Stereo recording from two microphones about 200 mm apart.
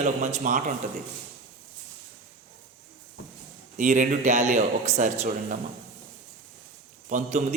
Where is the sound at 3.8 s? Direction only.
40° right (ahead or behind).